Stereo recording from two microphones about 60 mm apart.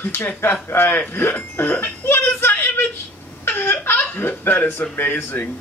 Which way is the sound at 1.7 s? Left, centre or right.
Left.